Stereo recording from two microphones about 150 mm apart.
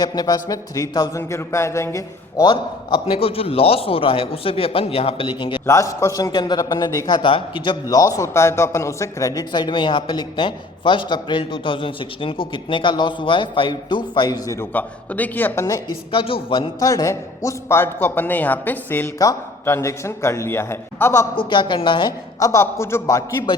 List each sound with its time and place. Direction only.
0.0 s speech: 25° left (ahead or behind)
5.6 s a man's voice: 20° left (ahead or behind)
16.1 s speech: 35° left (ahead or behind)
16.8 s speech: 20° left (ahead or behind)
21.3 s a man's voice: 30° left (ahead or behind)